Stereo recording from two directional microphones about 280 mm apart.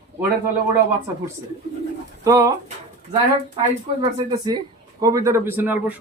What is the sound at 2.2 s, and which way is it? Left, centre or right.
Speech, centre.